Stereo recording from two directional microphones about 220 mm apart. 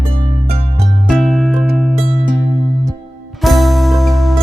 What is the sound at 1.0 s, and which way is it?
Music, centre (ahead or behind).